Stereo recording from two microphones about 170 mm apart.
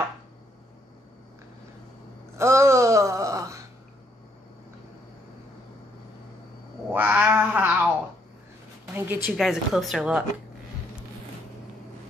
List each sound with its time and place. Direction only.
2.3 s a sound: 15° right (ahead or behind)
6.9 s cat: 10° right (ahead or behind)
8.9 s a woman's voice: 10° right (ahead or behind)